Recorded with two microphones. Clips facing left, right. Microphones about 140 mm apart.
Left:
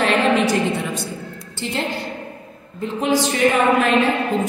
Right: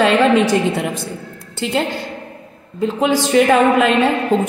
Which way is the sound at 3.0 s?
90° right.